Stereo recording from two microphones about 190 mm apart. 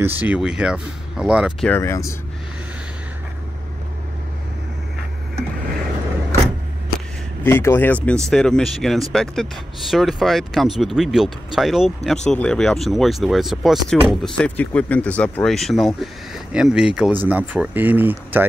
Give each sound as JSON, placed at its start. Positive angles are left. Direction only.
{"t": 0.0, "sound": "speech", "side_deg": -10}
{"t": 1.7, "sound": "speech", "side_deg": 15}
{"t": 7.4, "sound": "speech", "side_deg": 10}